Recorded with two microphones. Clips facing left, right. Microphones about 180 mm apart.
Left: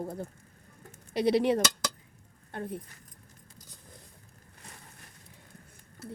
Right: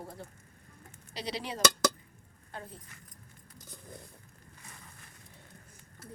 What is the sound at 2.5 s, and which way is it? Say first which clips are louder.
Speech: left 9 dB; 60° left (ahead or behind).